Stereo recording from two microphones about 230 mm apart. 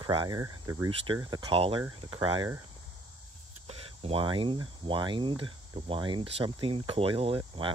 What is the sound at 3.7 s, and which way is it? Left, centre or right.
Speech, right.